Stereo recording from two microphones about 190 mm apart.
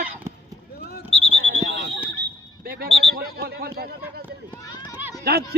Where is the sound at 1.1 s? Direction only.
30° left (ahead or behind).